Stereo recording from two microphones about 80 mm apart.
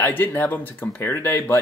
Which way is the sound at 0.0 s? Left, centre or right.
Left.